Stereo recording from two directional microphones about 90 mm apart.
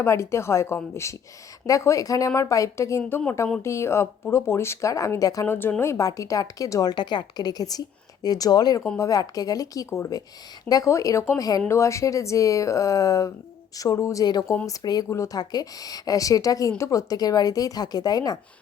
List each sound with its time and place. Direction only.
0.0 s speech: 30° left (ahead or behind)
5.5 s speech: 25° left (ahead or behind)
5.8 s speech: 35° left (ahead or behind)
6.9 s a woman's voice: 55° left (ahead or behind); by 11.3 s 35° left (ahead or behind)
11.3 s a woman's voice: 45° left (ahead or behind)
11.7 s speech: 35° left (ahead or behind)
14.3 s a woman's voice: 50° left (ahead or behind)